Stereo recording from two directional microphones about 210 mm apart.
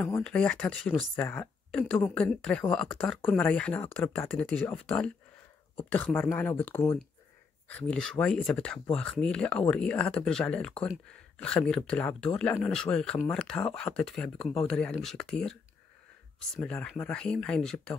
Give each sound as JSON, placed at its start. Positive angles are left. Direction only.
{"t": 0.0, "sound": "speech", "side_deg": 5}
{"t": 16.5, "sound": "speech", "side_deg": 5}